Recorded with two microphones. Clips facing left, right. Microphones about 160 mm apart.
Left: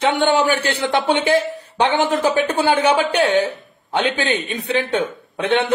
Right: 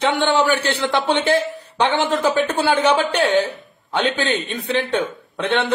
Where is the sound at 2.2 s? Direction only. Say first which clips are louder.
Left 1 dB; 10° left (ahead or behind).